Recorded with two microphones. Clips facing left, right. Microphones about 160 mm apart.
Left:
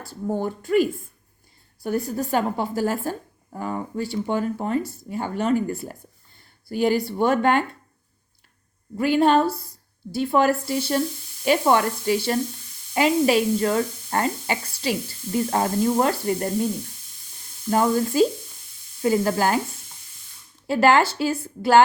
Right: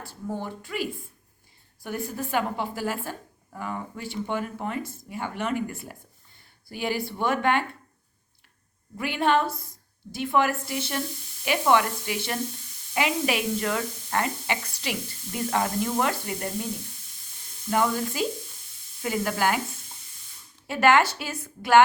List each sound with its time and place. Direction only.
0.1 s a woman's voice: 45° left (ahead or behind)
9.0 s a woman's voice: 35° left (ahead or behind)
17.7 s a woman's voice: 35° left (ahead or behind)
20.7 s a woman's voice: 30° left (ahead or behind)